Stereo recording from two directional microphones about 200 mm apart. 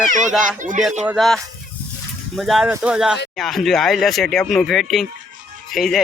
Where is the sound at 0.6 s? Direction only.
40° right (ahead or behind).